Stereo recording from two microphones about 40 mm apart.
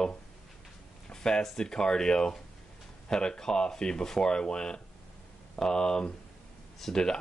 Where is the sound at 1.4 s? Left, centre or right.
Centre.